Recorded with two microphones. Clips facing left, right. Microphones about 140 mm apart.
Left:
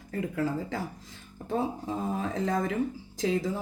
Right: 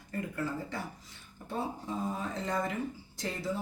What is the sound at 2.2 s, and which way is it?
Speech, 90° left.